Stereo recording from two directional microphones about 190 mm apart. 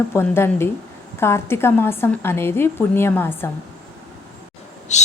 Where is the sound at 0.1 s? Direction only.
10° left (ahead or behind).